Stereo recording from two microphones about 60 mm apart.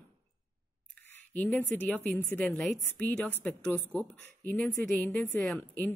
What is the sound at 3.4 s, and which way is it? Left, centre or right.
Speech, centre.